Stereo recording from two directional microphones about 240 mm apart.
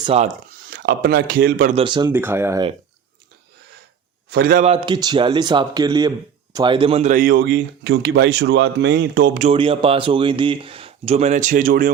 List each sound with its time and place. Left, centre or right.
0.0 s speech: right
1.7 s speech: right
4.3 s a man's voice: right
4.6 s a man's voice: right